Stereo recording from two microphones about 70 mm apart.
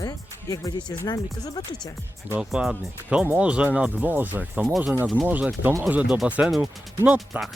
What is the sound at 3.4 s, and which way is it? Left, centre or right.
Speech, centre.